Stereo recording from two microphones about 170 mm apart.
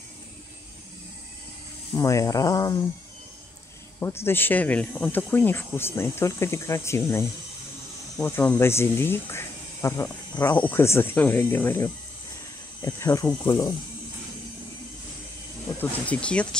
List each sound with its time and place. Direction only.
2.0 s speech: 20° left (ahead or behind)
4.0 s speech: 15° left (ahead or behind)
15.8 s speech: 5° left (ahead or behind)